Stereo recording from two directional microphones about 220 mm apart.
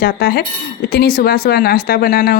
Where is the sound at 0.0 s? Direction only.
45° left (ahead or behind).